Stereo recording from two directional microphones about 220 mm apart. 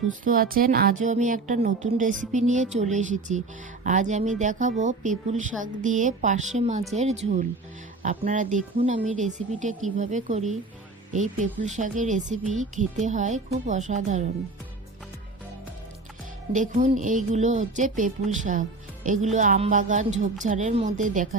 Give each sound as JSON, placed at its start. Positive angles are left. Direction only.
{"t": 0.3, "sound": "a woman's voice", "side_deg": -40}
{"t": 16.6, "sound": "a woman's voice", "side_deg": -35}